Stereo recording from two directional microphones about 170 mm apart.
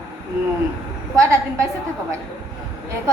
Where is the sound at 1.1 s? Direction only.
15° right (ahead or behind).